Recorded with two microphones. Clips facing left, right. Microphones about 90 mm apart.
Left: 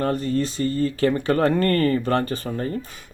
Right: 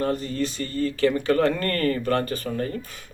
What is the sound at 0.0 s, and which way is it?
Speech, 40° left (ahead or behind).